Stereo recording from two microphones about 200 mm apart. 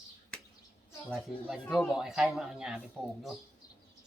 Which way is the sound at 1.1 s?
Centre (ahead or behind).